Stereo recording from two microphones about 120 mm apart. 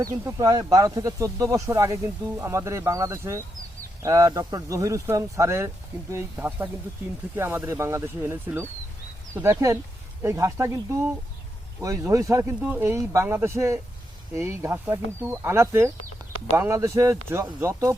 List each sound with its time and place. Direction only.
0.0 s speech: 30° right (ahead or behind)